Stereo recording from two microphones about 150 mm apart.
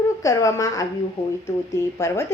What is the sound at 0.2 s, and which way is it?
A woman's voice, 20° left (ahead or behind).